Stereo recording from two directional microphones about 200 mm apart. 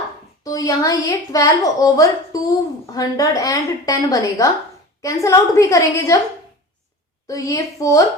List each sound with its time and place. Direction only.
0.4 s a woman's voice: 15° left (ahead or behind)
7.3 s a woman's voice: 15° left (ahead or behind)